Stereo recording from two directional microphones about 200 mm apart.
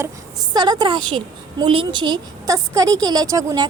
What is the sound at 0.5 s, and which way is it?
A woman's voice, 20° right (ahead or behind).